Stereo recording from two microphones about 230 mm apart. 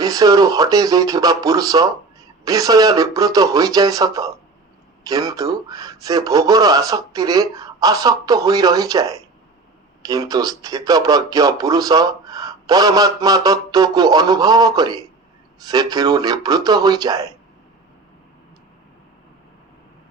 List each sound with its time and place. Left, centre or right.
0.0 s speech: centre